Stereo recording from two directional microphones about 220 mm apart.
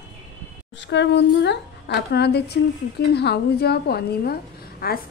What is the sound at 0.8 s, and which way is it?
A woman's voice, 55° left (ahead or behind).